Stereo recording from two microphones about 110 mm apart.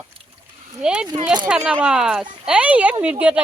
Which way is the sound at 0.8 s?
10° right (ahead or behind).